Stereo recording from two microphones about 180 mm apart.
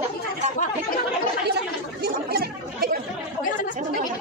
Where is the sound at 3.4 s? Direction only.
50° left (ahead or behind).